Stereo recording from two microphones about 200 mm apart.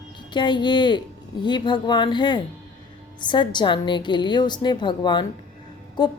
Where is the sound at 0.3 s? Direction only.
20° left (ahead or behind).